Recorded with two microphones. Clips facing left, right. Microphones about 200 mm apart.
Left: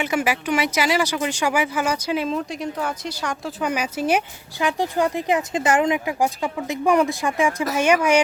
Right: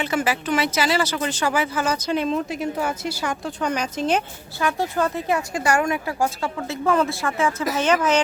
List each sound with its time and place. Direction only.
0.0 s speech: 15° left (ahead or behind); by 3.5 s 5° right (ahead or behind)
3.6 s speech: 10° left (ahead or behind)